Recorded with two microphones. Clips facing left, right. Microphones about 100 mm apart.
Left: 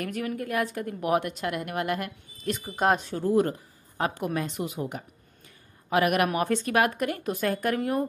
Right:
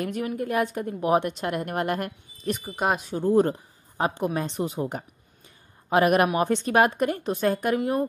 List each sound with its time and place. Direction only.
0.0 s a woman's voice: 25° right (ahead or behind)
2.4 s speech: 15° right (ahead or behind)
2.7 s speech: 5° right (ahead or behind)
3.1 s a woman's voice: 20° right (ahead or behind)